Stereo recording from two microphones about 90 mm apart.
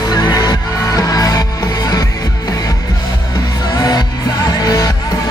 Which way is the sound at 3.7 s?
45° left (ahead or behind).